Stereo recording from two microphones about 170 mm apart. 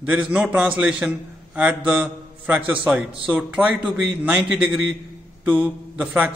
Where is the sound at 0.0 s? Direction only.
5° right (ahead or behind).